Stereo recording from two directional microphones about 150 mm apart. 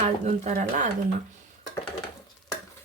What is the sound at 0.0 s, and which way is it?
Speech, 55° right (ahead or behind).